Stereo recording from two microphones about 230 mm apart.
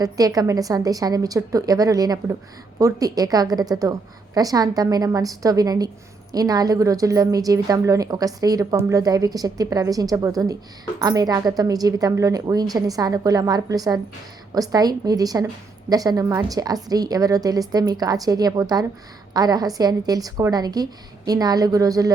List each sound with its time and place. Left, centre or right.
0.0 s a woman's voice: centre